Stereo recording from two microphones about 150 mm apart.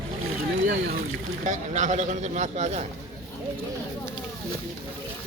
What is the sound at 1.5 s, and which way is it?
A man's voice, 55° right (ahead or behind).